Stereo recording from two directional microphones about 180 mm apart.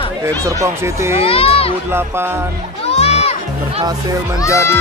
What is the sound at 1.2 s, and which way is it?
Speech, 30° left (ahead or behind).